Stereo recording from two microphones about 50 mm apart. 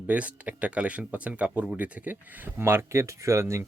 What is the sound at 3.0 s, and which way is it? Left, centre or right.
Speech, right.